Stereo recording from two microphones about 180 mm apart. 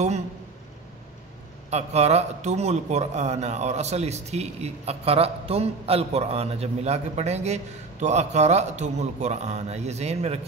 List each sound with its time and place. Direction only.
1.7 s speech: 35° right (ahead or behind)